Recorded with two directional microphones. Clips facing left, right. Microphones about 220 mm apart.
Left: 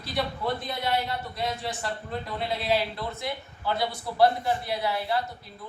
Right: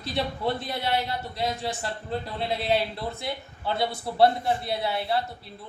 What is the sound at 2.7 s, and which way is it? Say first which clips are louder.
A man's voice: even; 25° right (ahead or behind).